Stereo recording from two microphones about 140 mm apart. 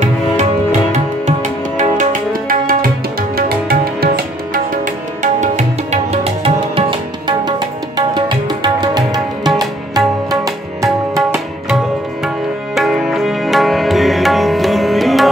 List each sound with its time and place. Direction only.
0.0 s music: 55° right (ahead or behind); by 4.1 s 90° right
4.8 s music: 60° right (ahead or behind); by 11.2 s 25° right (ahead or behind)
12.7 s music: centre (ahead or behind)